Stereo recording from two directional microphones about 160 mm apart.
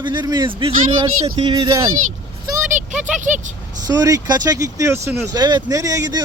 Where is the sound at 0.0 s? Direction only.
30° right (ahead or behind).